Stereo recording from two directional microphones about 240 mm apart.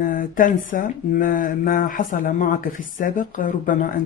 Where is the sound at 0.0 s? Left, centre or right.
Left.